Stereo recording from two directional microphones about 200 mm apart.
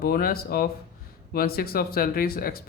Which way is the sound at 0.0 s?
50° left (ahead or behind).